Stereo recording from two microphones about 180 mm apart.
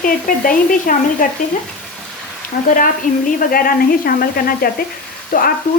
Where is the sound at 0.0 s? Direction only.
50° left (ahead or behind).